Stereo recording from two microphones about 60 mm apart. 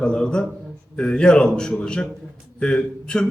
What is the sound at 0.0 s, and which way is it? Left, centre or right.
A man's voice, centre.